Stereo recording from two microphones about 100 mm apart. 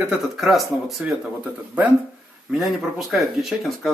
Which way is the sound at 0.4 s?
Centre (ahead or behind).